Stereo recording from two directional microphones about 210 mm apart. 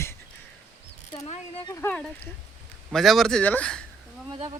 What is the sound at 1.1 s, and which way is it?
Mechanisms, 30° left (ahead or behind).